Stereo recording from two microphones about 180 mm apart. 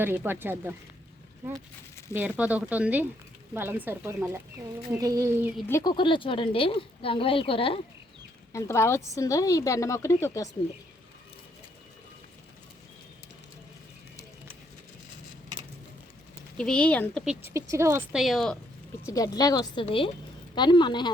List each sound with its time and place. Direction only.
0.0 s speech: 10° right (ahead or behind)
2.1 s speech: 10° right (ahead or behind)
5.6 s speech: 20° left (ahead or behind)
8.5 s speech: 15° left (ahead or behind)
16.6 s speech: 5° left (ahead or behind)
17.2 s speech: 15° right (ahead or behind)
18.1 s speech: centre (ahead or behind)
19.0 s speech: 20° left (ahead or behind)